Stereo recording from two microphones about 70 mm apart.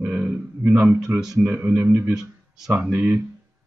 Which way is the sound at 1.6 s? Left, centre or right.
Right.